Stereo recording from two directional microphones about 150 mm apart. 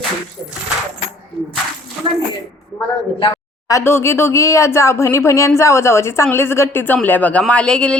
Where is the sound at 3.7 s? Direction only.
20° left (ahead or behind).